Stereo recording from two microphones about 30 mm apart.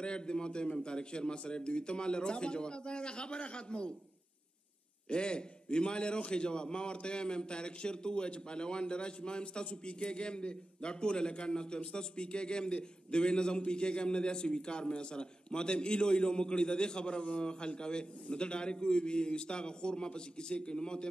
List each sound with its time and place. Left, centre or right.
0.0 s a man's voice: left
5.1 s a man's voice: left